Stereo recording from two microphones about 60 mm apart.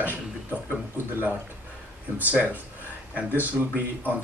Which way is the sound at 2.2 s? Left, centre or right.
Right.